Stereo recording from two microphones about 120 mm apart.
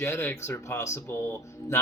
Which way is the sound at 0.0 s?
20° left (ahead or behind).